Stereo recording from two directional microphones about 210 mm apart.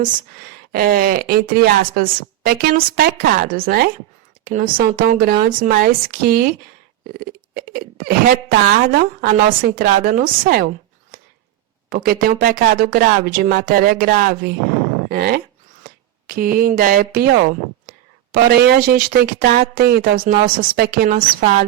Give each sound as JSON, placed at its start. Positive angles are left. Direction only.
{"t": 0.7, "sound": "speech", "side_deg": -45}
{"t": 11.9, "sound": "speech", "side_deg": -45}